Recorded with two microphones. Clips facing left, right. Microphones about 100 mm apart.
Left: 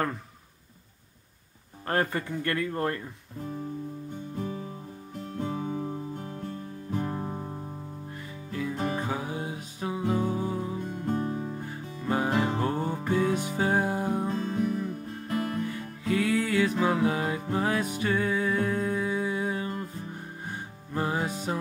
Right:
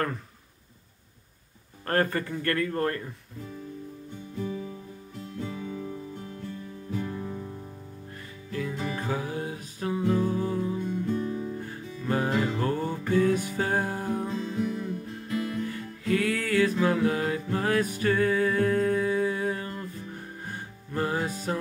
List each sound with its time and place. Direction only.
1.9 s speech: 15° left (ahead or behind)
5.2 s music: 45° left (ahead or behind)
8.9 s music: 20° left (ahead or behind)
10.9 s music: 40° left (ahead or behind)
12.1 s music: 20° left (ahead or behind)
14.2 s music: 40° left (ahead or behind)
16.0 s music: 20° left (ahead or behind)
20.9 s music: 15° left (ahead or behind)